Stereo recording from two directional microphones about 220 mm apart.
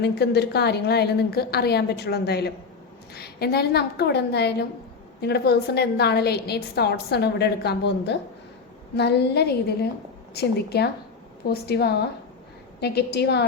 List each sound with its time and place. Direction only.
0.0 s a woman's voice: 50° left (ahead or behind)